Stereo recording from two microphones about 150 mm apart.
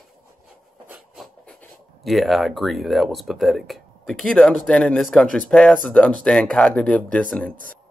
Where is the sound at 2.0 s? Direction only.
Centre (ahead or behind).